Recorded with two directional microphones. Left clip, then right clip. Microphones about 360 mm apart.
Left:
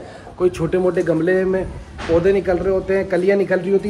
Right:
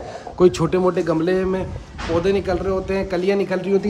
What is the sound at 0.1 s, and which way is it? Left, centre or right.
A man's voice, right.